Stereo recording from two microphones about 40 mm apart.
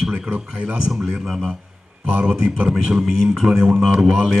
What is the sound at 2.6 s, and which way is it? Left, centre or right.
Speech, right.